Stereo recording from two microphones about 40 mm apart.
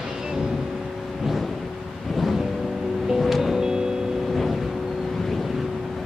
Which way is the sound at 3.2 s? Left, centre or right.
Centre.